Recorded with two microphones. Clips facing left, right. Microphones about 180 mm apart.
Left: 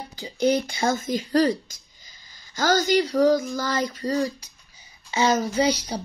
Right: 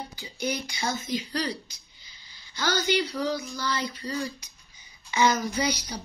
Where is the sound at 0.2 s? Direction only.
45° left (ahead or behind).